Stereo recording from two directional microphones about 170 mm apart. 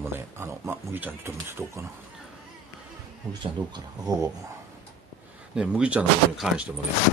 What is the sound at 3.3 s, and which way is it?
Speech, 25° right (ahead or behind).